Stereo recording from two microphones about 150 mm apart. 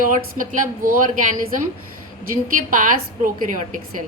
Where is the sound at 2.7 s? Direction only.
65° right (ahead or behind).